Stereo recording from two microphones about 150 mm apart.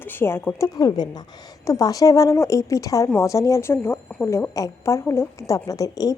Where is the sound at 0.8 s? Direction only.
25° left (ahead or behind).